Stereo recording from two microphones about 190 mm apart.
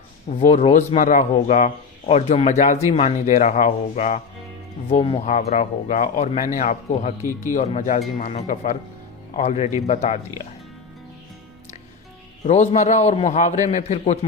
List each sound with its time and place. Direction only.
0.3 s speech: 35° left (ahead or behind)
12.5 s speech: 35° left (ahead or behind)